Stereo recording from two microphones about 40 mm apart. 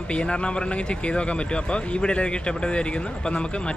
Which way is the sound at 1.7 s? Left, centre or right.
Left.